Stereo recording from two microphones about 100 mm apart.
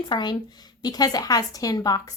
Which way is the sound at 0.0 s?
50° left (ahead or behind).